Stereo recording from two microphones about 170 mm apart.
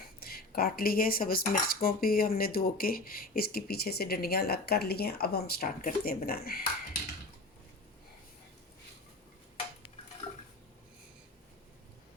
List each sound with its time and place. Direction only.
0.2 s speech: 65° left (ahead or behind)